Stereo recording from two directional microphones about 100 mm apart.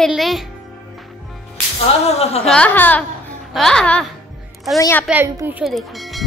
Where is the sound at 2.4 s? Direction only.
10° left (ahead or behind).